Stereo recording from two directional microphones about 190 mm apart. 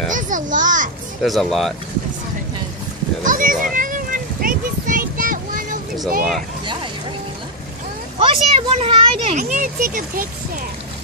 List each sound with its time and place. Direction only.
0.1 s children playing: 40° right (ahead or behind)
1.2 s speech: centre (ahead or behind)
3.3 s a sound: 45° right (ahead or behind)
6.6 s vehicle: 25° right (ahead or behind)
8.2 s speech: 30° right (ahead or behind); by 10.6 s 45° right (ahead or behind)